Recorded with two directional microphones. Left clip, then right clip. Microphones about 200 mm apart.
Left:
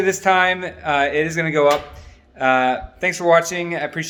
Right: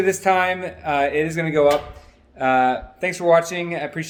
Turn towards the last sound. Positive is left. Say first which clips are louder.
# left 2 dB
turn(degrees=10)  # may be behind; listen again after turning